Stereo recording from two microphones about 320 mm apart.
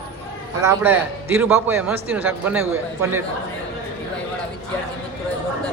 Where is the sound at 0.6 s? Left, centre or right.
Centre.